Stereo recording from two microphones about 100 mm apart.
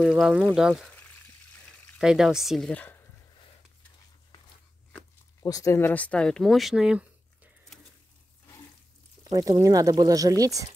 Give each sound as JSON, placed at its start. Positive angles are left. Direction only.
{"t": 0.0, "sound": "speech", "side_deg": -5}
{"t": 2.0, "sound": "speech", "side_deg": -5}
{"t": 2.7, "sound": "speech", "side_deg": 15}
{"t": 5.4, "sound": "speech", "side_deg": 35}
{"t": 5.8, "sound": "speech", "side_deg": 20}
{"t": 9.2, "sound": "speech", "side_deg": -35}